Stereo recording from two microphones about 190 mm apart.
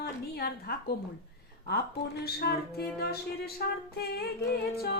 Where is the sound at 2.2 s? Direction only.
55° left (ahead or behind).